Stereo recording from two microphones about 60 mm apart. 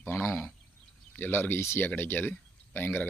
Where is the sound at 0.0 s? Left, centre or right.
Left.